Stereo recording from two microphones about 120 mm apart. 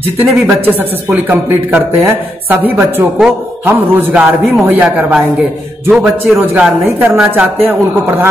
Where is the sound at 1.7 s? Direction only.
15° right (ahead or behind).